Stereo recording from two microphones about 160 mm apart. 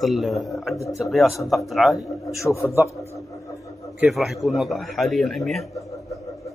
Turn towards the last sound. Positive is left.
turn(degrees=0)  # may be behind; listen again after turning